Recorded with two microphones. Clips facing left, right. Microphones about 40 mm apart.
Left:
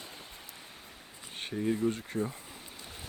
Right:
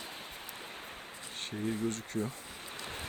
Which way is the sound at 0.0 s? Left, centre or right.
Right.